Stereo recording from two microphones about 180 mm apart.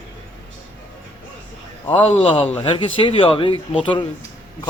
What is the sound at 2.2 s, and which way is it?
Speech, 30° left (ahead or behind).